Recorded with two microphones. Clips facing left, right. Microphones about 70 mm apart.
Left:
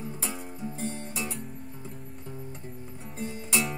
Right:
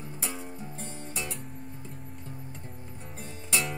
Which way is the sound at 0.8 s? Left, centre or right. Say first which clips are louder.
Left 7 dB; left.